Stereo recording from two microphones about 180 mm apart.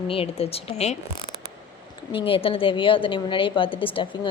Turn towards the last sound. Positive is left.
turn(degrees=30)  # may be behind; listen again after turning